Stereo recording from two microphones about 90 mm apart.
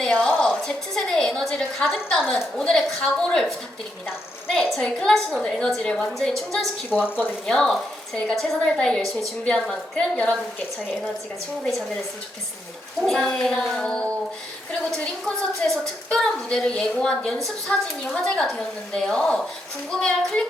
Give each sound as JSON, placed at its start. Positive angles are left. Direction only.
{"t": 0.0, "sound": "a sound", "side_deg": 5}
{"t": 0.3, "sound": "a woman's voice", "side_deg": 15}
{"t": 4.7, "sound": "a woman's voice", "side_deg": 5}
{"t": 7.0, "sound": "speech", "side_deg": 20}
{"t": 7.4, "sound": "a woman's voice", "side_deg": 5}
{"t": 13.0, "sound": "a woman's voice", "side_deg": 5}
{"t": 15.6, "sound": "a woman's voice", "side_deg": 5}